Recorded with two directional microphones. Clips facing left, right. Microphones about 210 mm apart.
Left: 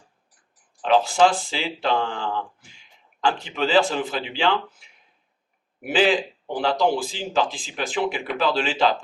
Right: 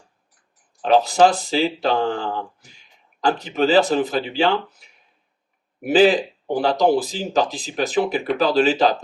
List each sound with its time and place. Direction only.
0.8 s speech: 40° right (ahead or behind)